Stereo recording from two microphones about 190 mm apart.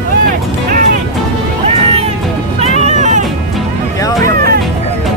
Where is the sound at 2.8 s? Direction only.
40° right (ahead or behind).